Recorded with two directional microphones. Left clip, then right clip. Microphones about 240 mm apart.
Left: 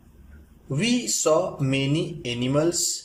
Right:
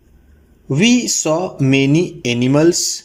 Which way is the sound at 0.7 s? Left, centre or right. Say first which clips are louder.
Right 10 dB; right.